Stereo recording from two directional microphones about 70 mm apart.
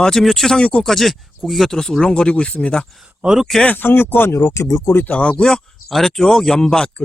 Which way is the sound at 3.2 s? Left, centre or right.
Centre.